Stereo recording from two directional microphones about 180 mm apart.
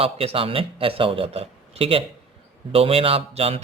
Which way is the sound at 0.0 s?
30° right (ahead or behind).